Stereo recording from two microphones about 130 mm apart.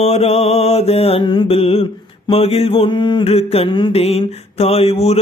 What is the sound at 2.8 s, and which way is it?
Mantra, 35° left (ahead or behind).